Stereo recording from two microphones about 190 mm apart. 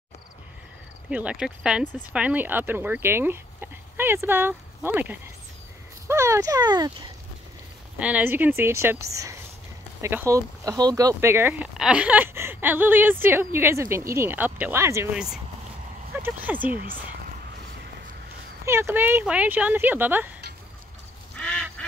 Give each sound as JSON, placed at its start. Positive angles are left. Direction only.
{"t": 1.1, "sound": "speech", "side_deg": -5}
{"t": 8.0, "sound": "speech", "side_deg": -10}
{"t": 16.1, "sound": "speech", "side_deg": -10}
{"t": 18.7, "sound": "speech", "side_deg": -15}
{"t": 21.4, "sound": "duck", "side_deg": 5}